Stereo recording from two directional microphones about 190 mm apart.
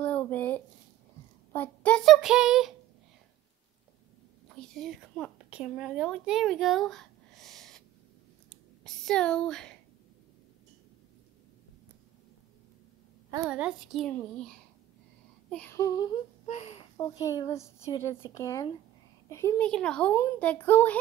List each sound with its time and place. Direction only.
0.0 s a sound: 10° left (ahead or behind)
1.5 s child singing: 10° left (ahead or behind)
4.6 s a sound: centre (ahead or behind)
5.5 s speech: 5° right (ahead or behind)
8.5 s clicking: centre (ahead or behind)
13.5 s a child's voice: 5° right (ahead or behind)
15.5 s speech: 10° left (ahead or behind)
16.4 s speech: 35° left (ahead or behind)
16.9 s a child's voice: 20° left (ahead or behind)